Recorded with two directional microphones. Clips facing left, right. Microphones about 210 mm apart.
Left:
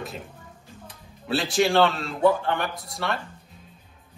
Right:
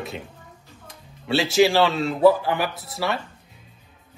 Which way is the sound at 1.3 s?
Centre (ahead or behind).